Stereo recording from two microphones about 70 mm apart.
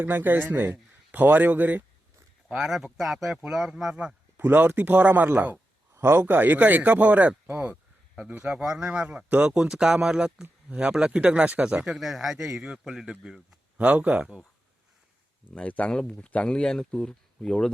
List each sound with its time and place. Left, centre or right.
0.0 s speech: right
2.6 s speech: centre
4.4 s speech: right
5.9 s speech: right
8.1 s speech: centre
11.9 s speech: centre
13.7 s speech: right
15.5 s speech: centre